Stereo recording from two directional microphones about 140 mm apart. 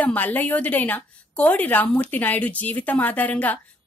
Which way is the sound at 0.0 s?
10° left (ahead or behind).